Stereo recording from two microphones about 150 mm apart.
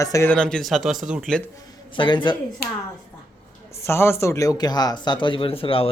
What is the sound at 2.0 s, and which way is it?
Speech, 30° left (ahead or behind).